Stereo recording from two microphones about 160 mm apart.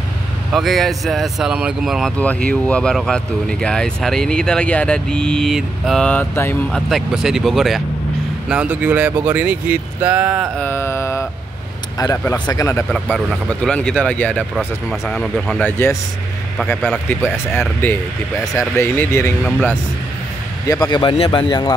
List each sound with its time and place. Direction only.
0.5 s speech: centre (ahead or behind)
6.7 s speech: centre (ahead or behind)
10.6 s mantra: 15° left (ahead or behind)
12.0 s speech: 20° left (ahead or behind)
12.9 s speech: centre (ahead or behind)
14.9 s speech: centre (ahead or behind)
15.6 s speech: 15° left (ahead or behind)
17.6 s speech: 10° left (ahead or behind)
20.6 s speech: 20° left (ahead or behind)